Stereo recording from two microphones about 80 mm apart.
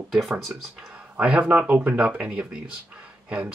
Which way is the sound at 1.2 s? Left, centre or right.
Centre.